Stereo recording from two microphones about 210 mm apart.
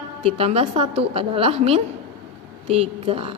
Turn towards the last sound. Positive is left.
turn(degrees=-25)  # may be behind; listen again after turning